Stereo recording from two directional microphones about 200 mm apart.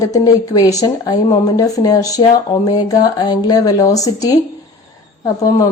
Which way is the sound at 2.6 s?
20° left (ahead or behind).